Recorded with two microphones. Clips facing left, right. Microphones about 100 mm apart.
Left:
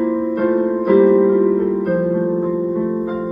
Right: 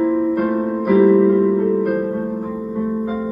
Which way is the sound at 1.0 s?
25° left (ahead or behind).